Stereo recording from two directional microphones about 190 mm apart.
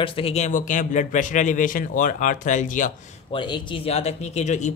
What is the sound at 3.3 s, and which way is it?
Speech, 25° left (ahead or behind).